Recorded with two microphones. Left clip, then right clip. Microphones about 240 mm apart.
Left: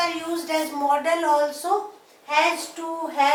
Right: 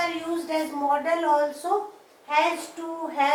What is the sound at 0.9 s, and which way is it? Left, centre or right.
Speech, centre.